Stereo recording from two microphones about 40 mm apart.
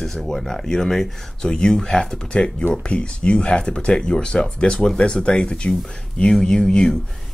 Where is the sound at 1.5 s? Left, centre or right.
Left.